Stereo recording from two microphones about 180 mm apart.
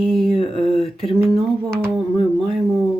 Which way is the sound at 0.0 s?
Centre (ahead or behind).